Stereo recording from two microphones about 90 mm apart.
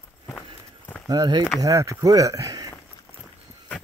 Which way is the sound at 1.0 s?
45° right (ahead or behind).